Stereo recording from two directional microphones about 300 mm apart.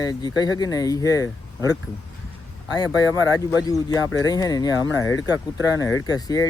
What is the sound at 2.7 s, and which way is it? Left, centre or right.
Speech, centre.